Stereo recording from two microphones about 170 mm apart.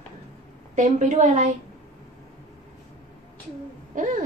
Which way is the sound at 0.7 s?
45° right (ahead or behind).